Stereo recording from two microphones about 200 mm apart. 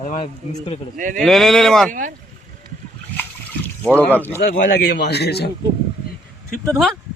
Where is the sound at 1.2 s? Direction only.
Centre (ahead or behind).